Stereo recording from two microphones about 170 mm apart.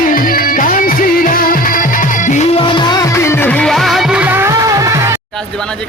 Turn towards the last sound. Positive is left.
turn(degrees=-20)  # may be behind; listen again after turning